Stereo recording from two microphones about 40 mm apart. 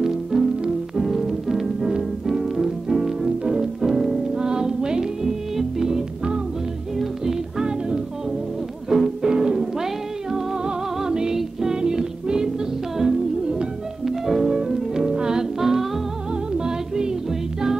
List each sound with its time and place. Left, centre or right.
0.0 s music: centre
1.8 s music: centre
2.2 s music: centre
4.4 s music: centre
14.5 s music: centre
15.6 s music: centre
16.3 s music: centre